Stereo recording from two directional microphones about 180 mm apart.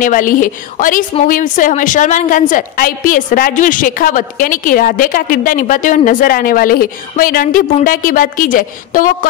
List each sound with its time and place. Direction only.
0.0 s a woman's voice: 50° left (ahead or behind)